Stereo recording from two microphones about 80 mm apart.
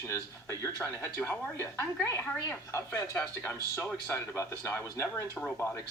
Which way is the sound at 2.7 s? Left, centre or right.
Left.